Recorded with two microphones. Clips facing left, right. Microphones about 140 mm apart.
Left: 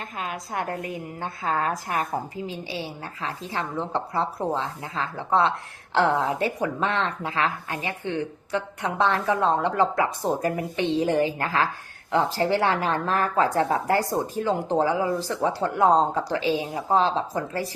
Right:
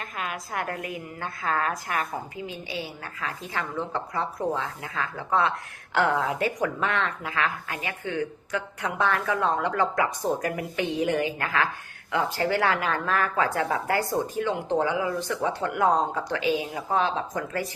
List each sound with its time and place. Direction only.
0.0 s a woman's voice: 30° left (ahead or behind)